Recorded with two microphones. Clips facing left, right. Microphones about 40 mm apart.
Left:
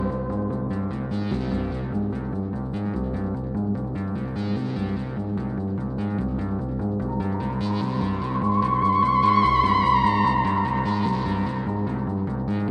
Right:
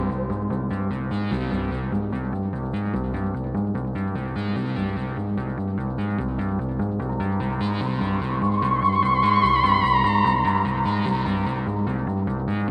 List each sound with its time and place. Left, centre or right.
8.0 s music: right